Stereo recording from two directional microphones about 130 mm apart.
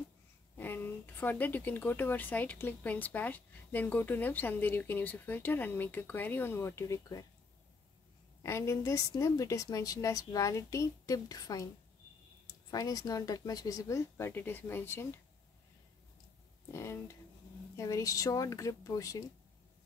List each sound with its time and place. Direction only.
0.6 s speech: 15° left (ahead or behind)
8.4 s a woman's voice: 25° left (ahead or behind)
12.7 s a woman's voice: 30° left (ahead or behind)
16.7 s a woman's voice: 20° left (ahead or behind)